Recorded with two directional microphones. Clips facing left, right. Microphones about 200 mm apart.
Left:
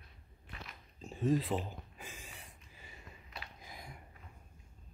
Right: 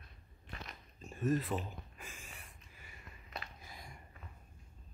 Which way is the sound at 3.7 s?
15° left (ahead or behind).